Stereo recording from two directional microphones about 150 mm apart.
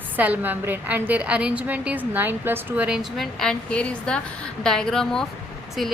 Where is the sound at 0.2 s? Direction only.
10° right (ahead or behind).